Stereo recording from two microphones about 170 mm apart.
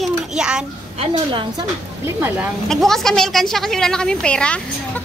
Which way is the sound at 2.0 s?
15° right (ahead or behind).